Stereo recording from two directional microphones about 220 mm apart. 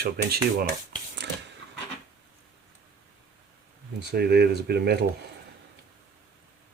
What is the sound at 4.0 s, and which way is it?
Speech, 50° right (ahead or behind).